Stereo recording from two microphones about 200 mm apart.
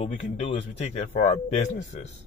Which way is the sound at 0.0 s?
30° left (ahead or behind).